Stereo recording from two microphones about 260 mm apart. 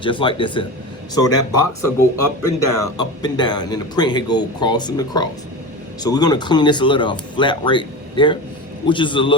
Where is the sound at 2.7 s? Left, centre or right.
Centre.